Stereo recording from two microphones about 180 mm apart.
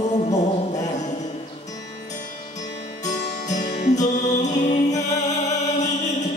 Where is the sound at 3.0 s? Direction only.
40° left (ahead or behind).